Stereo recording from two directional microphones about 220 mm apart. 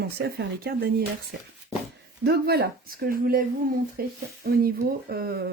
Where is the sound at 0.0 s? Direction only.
45° right (ahead or behind).